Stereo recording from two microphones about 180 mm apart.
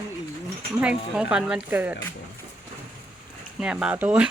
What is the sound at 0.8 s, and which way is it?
Speech, 5° right (ahead or behind).